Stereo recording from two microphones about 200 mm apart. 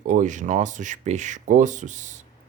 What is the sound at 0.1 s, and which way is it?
Speech, 40° right (ahead or behind).